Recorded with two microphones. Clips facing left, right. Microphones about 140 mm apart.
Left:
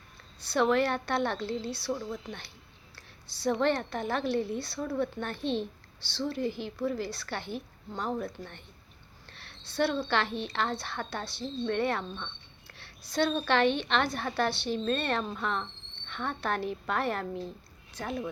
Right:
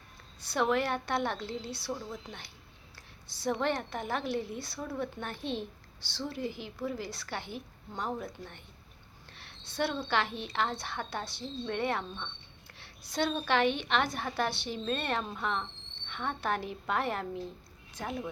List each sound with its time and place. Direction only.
0.4 s a woman's voice: 15° right (ahead or behind)
3.2 s a woman's voice: 15° right (ahead or behind)
9.3 s a sound: 15° right (ahead or behind)
10.1 s a woman's voice: 15° right (ahead or behind)